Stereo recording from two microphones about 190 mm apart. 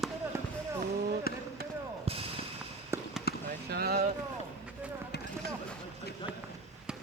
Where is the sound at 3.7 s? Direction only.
55° right (ahead or behind).